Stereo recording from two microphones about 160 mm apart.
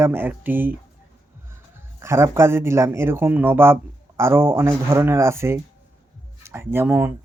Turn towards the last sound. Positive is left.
turn(degrees=-15)  # may be behind; listen again after turning